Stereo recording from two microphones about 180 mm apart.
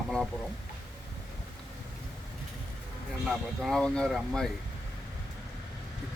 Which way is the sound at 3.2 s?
Centre (ahead or behind).